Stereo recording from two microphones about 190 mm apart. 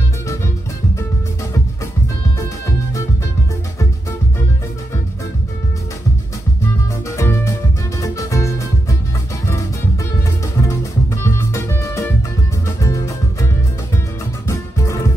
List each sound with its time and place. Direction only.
7.2 s music: 15° left (ahead or behind)
10.4 s music: 15° left (ahead or behind)